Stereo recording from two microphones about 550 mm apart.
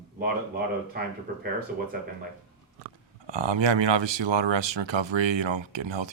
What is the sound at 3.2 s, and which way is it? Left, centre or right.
Speech, right.